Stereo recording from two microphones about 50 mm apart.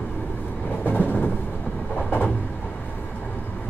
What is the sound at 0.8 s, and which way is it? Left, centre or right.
Train, left.